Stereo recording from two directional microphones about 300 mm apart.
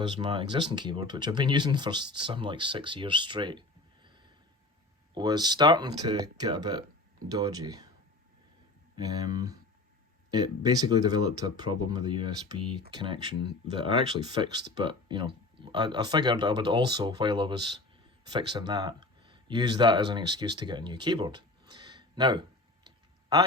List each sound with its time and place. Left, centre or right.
0.2 s speech: centre
4.0 s a sound: centre
5.1 s speech: centre
9.0 s speech: centre